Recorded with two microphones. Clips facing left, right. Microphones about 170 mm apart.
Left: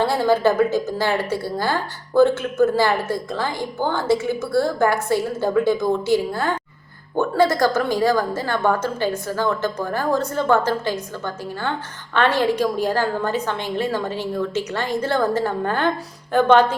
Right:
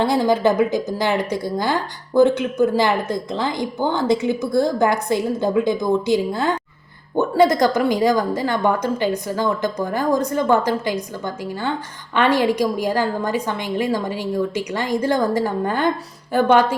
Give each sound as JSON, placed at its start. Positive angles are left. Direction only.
{"t": 0.0, "sound": "a woman's voice", "side_deg": -15}
{"t": 12.1, "sound": "a woman's voice", "side_deg": -15}